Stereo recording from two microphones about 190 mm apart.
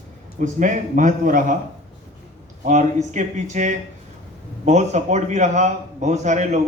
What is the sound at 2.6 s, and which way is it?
A man's voice, 40° right (ahead or behind).